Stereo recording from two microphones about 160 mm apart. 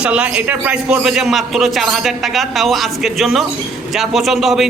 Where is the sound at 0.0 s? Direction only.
10° right (ahead or behind).